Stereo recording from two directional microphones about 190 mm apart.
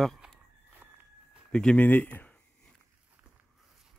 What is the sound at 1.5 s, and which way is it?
Speech, 5° left (ahead or behind).